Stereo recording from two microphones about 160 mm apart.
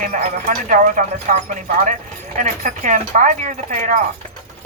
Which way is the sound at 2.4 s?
55° right (ahead or behind).